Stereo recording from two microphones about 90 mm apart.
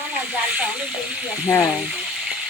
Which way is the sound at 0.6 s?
10° right (ahead or behind).